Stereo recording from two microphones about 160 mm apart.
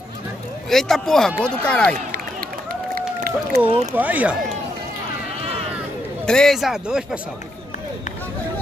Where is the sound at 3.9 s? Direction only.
10° right (ahead or behind).